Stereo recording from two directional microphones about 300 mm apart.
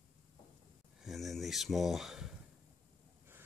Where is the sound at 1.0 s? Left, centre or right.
Centre.